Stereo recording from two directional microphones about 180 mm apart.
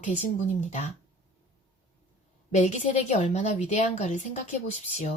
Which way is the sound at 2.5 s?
40° left (ahead or behind).